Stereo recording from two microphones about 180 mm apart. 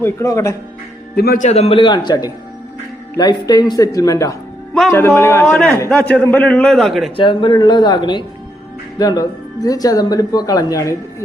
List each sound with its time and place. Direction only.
0.0 s a man's voice: 15° left (ahead or behind)
1.1 s speech: 55° left (ahead or behind)
1.5 s a woman's voice: 35° left (ahead or behind); by 5.5 s 15° left (ahead or behind)
5.5 s a man's voice: 5° left (ahead or behind)
7.2 s a woman's voice: 25° left (ahead or behind)